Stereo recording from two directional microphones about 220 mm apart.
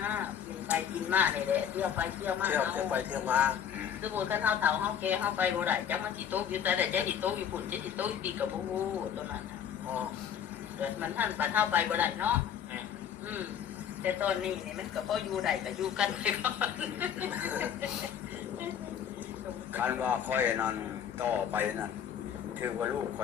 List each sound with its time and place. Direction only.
0.0 s a sound: 5° right (ahead or behind)
0.7 s speech: 5° right (ahead or behind)
10.8 s speech: 5° right (ahead or behind)
14.0 s speech: 5° right (ahead or behind)
19.7 s speech: 10° right (ahead or behind)